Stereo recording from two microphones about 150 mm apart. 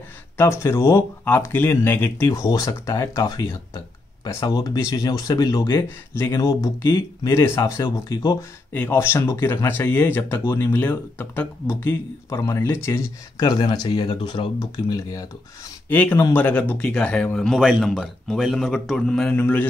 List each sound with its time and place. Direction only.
0.4 s speech: 20° left (ahead or behind)
8.7 s speech: 15° left (ahead or behind)
15.9 s speech: 10° left (ahead or behind)